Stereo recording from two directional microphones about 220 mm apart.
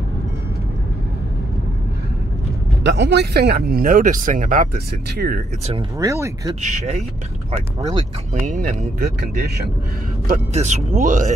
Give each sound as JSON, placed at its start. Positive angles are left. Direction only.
{"t": 2.8, "sound": "speech", "side_deg": -50}
{"t": 5.9, "sound": "speech", "side_deg": -15}
{"t": 6.6, "sound": "speech", "side_deg": -30}
{"t": 7.5, "sound": "speech", "side_deg": -20}
{"t": 8.5, "sound": "speech", "side_deg": -35}